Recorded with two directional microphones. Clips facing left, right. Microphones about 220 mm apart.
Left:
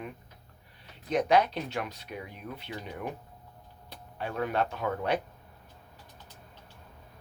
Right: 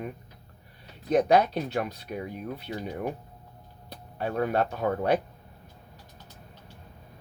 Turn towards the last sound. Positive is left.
turn(degrees=-40)  # may be behind; listen again after turning